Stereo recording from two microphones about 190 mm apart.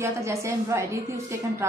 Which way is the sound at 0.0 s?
15° right (ahead or behind).